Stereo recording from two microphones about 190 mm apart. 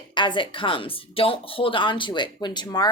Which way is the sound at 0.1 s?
25° left (ahead or behind).